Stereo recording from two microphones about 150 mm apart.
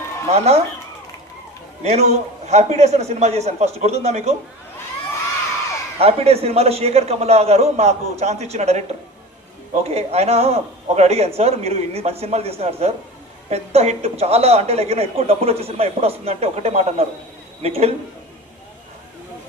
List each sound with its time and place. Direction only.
0.3 s speech: 45° right (ahead or behind)
1.8 s speech: 45° right (ahead or behind)
6.0 s speech: 40° right (ahead or behind)